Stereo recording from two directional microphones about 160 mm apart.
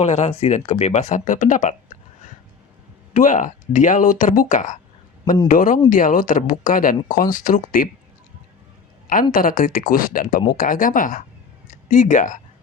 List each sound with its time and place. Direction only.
0.0 s speech: 45° left (ahead or behind); by 7.9 s 60° left (ahead or behind)
9.3 s speech: 60° left (ahead or behind)